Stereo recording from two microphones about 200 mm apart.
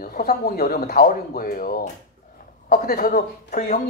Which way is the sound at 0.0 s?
45° left (ahead or behind).